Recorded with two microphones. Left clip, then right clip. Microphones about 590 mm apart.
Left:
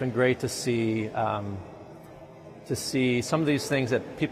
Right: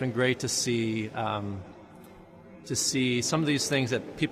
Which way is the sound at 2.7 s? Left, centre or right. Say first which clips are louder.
Left 1 dB; left.